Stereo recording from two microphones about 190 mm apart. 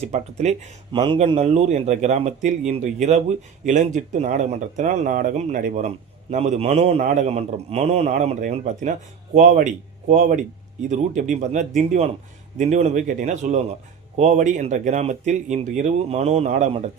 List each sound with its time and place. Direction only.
0.0 s a man's voice: 35° right (ahead or behind)
1.0 s a man's voice: 25° right (ahead or behind)